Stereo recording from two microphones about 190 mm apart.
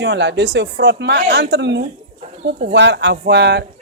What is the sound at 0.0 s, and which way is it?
Speech, 65° right (ahead or behind).